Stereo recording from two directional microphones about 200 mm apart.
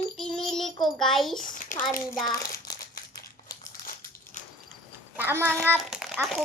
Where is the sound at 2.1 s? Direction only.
20° left (ahead or behind).